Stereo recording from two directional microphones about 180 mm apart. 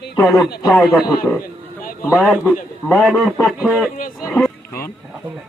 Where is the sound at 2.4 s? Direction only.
10° left (ahead or behind).